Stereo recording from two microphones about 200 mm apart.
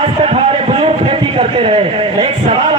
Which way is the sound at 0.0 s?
30° right (ahead or behind).